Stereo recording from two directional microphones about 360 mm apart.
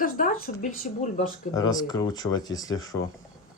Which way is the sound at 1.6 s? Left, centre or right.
Centre.